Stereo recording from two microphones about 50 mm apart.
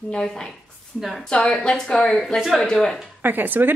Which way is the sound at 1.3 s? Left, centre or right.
Centre.